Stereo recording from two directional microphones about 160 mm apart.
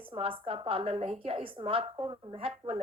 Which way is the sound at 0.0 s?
35° right (ahead or behind).